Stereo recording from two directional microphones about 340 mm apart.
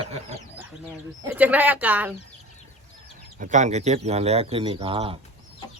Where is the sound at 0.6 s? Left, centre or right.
Centre.